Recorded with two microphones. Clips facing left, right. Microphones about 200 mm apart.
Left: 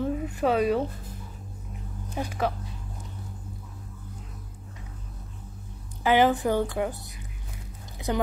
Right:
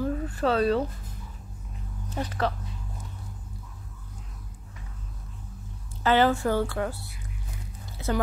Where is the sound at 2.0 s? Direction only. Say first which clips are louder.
Even; 10° left (ahead or behind).